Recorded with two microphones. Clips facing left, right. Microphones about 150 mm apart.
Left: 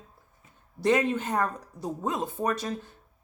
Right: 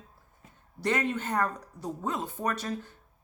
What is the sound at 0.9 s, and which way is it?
Speech, 15° left (ahead or behind).